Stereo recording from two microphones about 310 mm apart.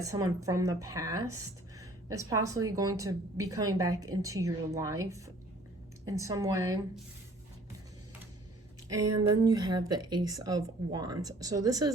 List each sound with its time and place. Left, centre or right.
0.0 s speech: centre
9.3 s speech: centre